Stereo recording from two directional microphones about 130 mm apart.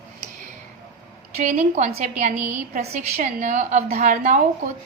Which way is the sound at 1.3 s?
75° right (ahead or behind).